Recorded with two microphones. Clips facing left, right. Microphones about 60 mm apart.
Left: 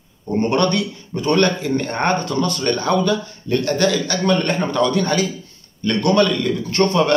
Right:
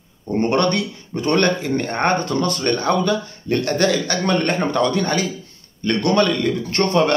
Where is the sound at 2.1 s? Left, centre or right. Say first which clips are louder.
Right 1 dB; right.